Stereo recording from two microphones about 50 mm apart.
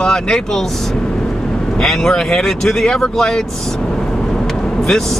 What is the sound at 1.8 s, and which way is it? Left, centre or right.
Speech, centre.